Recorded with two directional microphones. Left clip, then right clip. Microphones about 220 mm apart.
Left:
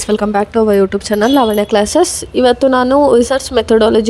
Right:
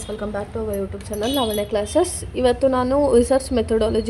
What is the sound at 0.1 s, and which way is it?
Speech, 40° left (ahead or behind).